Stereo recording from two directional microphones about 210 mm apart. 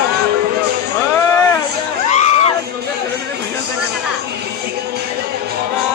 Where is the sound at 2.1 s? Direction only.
30° left (ahead or behind).